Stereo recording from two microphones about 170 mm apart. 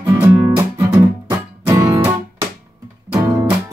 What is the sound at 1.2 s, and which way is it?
Music, 20° right (ahead or behind).